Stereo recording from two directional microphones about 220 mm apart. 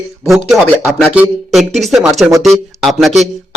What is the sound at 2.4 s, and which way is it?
Speech, centre (ahead or behind).